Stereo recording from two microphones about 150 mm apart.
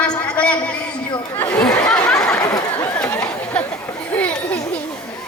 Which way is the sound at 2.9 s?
10° left (ahead or behind).